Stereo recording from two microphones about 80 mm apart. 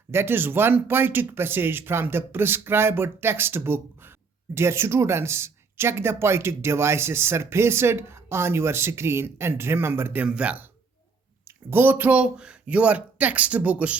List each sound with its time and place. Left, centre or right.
0.1 s speech: right
10.2 s speech: centre
11.4 s speech: right